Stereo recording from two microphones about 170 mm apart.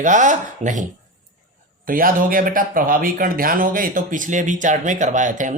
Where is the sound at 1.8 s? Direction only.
55° right (ahead or behind).